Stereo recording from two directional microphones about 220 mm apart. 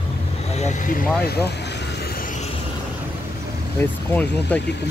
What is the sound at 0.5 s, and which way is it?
Vehicle, 30° left (ahead or behind).